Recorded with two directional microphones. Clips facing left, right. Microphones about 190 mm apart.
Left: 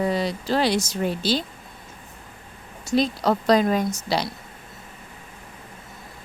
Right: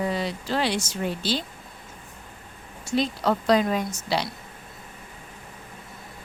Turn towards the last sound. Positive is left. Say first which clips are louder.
# left 3 dB
turn(degrees=40)  # may be behind; listen again after turning